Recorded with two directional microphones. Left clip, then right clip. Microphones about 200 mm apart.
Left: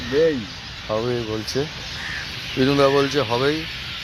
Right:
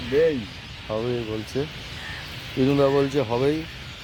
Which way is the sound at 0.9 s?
15° left (ahead or behind).